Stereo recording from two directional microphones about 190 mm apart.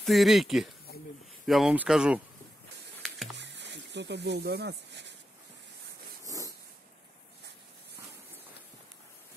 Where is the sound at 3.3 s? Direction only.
65° right (ahead or behind).